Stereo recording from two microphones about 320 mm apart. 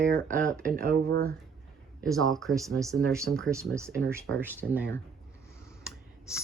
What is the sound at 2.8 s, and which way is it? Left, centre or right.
Speech, centre.